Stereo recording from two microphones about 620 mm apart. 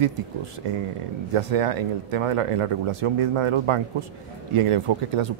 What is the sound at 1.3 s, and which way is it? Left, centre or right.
Speech, right.